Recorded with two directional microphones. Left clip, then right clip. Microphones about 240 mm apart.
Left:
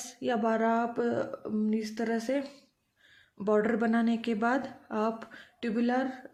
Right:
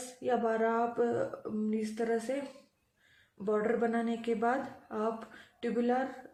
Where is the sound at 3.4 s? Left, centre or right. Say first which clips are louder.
Left 3 dB; left.